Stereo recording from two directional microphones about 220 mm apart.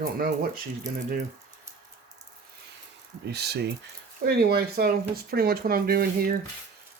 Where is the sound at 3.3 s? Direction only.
50° right (ahead or behind).